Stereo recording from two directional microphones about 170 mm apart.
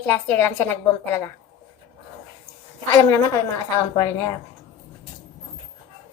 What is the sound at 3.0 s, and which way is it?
Speech, 20° left (ahead or behind).